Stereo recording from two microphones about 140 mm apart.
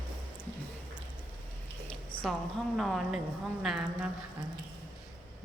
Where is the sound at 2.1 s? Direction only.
35° left (ahead or behind).